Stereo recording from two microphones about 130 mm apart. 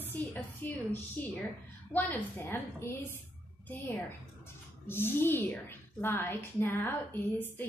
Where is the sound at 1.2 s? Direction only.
15° left (ahead or behind).